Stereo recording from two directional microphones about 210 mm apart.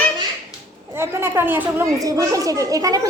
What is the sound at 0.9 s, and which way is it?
A child's voice, 10° right (ahead or behind).